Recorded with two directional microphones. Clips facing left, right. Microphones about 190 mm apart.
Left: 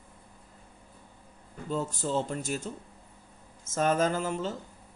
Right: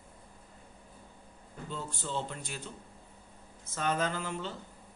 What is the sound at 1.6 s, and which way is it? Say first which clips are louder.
Speech: left 8 dB; 40° left (ahead or behind).